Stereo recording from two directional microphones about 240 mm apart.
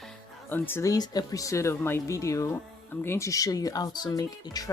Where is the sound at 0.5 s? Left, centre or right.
Centre.